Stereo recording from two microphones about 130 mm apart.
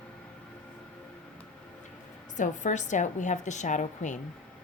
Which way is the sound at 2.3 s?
70° left (ahead or behind).